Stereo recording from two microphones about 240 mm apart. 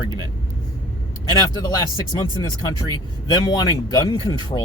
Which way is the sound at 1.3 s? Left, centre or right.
Centre.